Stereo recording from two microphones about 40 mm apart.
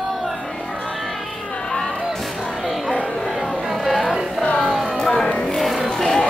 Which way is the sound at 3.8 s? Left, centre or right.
Centre.